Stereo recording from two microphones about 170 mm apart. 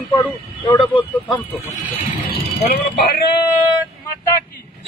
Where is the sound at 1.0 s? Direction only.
35° left (ahead or behind).